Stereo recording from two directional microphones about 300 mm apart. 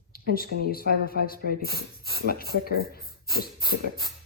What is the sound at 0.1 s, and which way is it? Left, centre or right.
Speech, left.